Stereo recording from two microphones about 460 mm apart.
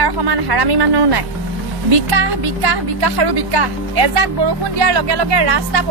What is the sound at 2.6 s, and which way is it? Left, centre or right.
A woman's voice, right.